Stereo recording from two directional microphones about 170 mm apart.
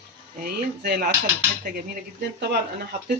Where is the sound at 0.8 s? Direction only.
60° right (ahead or behind).